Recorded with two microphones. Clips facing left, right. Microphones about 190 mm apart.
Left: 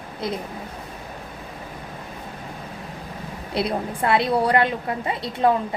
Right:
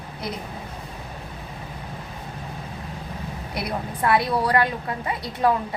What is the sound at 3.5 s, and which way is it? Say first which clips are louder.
A woman's voice: left 5 dB; 25° left (ahead or behind).